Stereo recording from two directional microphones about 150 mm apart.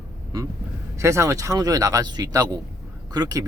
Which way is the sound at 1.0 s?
20° right (ahead or behind).